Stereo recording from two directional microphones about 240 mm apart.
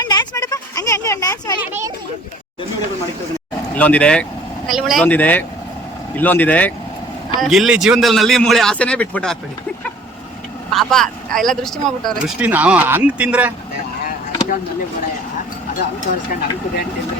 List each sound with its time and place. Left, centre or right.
0.0 s a sound: centre
3.8 s speech: centre
10.7 s speech: centre
16.0 s speech: left